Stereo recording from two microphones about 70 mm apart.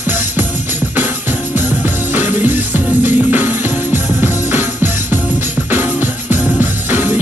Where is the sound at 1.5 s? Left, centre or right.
Right.